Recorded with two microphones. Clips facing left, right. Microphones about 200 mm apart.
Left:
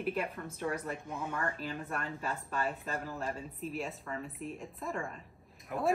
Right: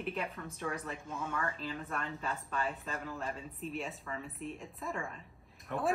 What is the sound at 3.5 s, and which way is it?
A woman's voice, centre (ahead or behind).